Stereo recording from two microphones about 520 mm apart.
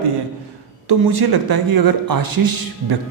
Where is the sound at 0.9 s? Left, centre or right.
Right.